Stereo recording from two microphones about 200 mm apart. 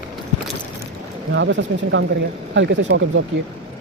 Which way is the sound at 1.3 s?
65° right (ahead or behind).